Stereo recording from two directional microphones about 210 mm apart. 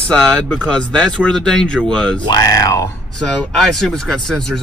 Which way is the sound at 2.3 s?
15° left (ahead or behind).